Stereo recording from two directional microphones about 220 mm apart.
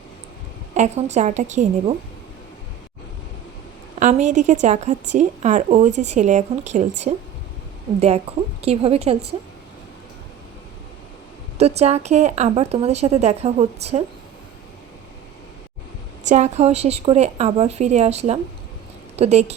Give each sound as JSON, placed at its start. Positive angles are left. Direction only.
{"t": 0.7, "sound": "a woman's voice", "side_deg": -30}
{"t": 4.0, "sound": "a woman's voice", "side_deg": -35}
{"t": 11.5, "sound": "speech", "side_deg": -30}
{"t": 16.2, "sound": "speech", "side_deg": -30}